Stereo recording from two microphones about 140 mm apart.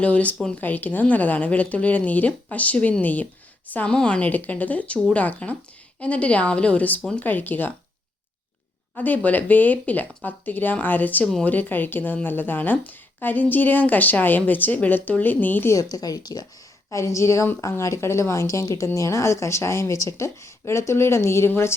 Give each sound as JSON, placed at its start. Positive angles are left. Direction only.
{"t": 0.0, "sound": "speech", "side_deg": 10}
{"t": 9.0, "sound": "speech", "side_deg": 10}
{"t": 15.7, "sound": "a woman's voice", "side_deg": 25}